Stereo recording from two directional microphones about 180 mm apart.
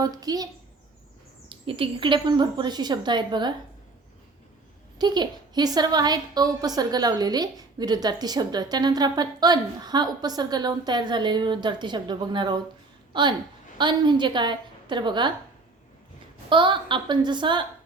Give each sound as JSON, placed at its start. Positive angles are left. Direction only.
{"t": 0.0, "sound": "a woman's voice", "side_deg": -20}
{"t": 1.5, "sound": "a woman's voice", "side_deg": -30}
{"t": 4.9, "sound": "a woman's voice", "side_deg": -25}
{"t": 16.5, "sound": "a woman's voice", "side_deg": -25}